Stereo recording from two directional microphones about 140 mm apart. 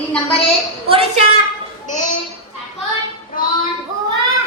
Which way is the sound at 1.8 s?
65° left (ahead or behind).